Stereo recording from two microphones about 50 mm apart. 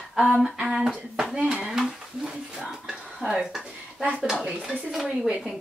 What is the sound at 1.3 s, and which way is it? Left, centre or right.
Speech, right.